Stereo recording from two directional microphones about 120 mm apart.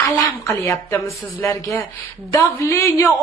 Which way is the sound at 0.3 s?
25° left (ahead or behind).